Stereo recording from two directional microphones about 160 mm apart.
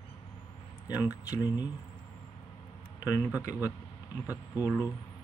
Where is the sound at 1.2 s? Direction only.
25° left (ahead or behind).